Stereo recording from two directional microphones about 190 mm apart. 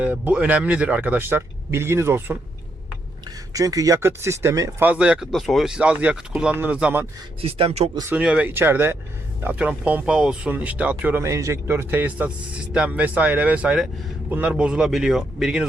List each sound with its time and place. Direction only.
0.0 s speech: 5° right (ahead or behind)
3.5 s speech: 20° right (ahead or behind)
7.4 s speech: 30° right (ahead or behind)
8.1 s speech: 5° right (ahead or behind)